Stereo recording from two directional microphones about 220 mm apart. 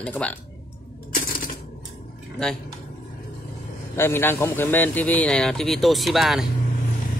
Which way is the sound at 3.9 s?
10° left (ahead or behind).